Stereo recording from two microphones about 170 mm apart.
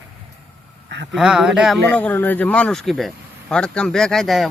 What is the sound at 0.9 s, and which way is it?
Speech, 90° right.